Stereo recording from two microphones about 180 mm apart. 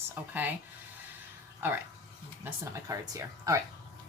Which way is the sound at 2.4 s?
20° right (ahead or behind).